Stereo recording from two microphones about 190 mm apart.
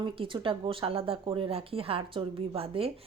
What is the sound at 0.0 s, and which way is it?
Speech, 25° right (ahead or behind).